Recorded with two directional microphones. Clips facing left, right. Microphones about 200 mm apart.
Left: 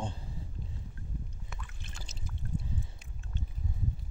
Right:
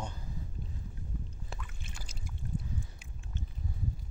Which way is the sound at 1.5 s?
30° right (ahead or behind).